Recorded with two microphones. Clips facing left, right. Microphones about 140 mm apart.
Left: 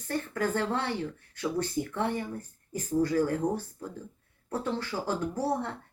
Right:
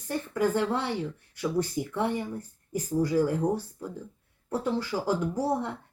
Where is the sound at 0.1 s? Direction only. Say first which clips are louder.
Right 3 dB; 15° right (ahead or behind).